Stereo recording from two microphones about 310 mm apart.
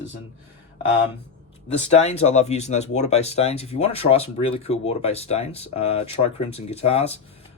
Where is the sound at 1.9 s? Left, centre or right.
Left.